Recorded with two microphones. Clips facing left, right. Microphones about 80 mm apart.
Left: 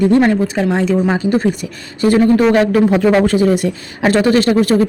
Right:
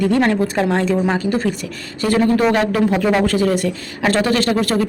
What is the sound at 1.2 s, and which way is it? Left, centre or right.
A woman's voice, centre.